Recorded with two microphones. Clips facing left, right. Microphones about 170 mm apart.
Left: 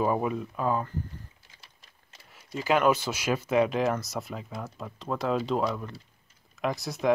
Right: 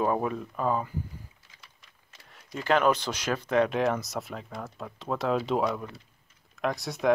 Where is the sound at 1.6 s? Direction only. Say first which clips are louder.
Even; 30° left (ahead or behind).